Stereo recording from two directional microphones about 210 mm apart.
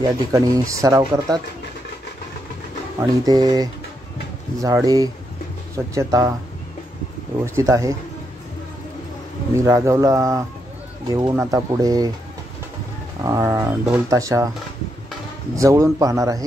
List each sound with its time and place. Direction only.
0.3 s speech: 15° right (ahead or behind)
3.0 s speech: 20° right (ahead or behind)
7.4 s speech: 15° right (ahead or behind)
9.6 s speech: 15° right (ahead or behind)
13.2 s speech: 15° right (ahead or behind)
15.5 s speech: 15° right (ahead or behind)